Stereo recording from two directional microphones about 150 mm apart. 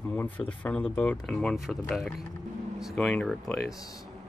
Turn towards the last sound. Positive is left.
turn(degrees=0)  # may be behind; listen again after turning